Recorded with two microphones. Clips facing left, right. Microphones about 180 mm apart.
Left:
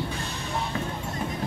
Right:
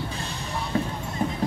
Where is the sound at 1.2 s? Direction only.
40° right (ahead or behind).